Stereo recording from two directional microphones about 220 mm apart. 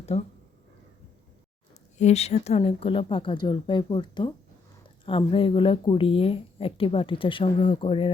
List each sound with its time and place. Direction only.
0.1 s a woman's voice: 30° left (ahead or behind)
2.0 s a woman's voice: 30° left (ahead or behind)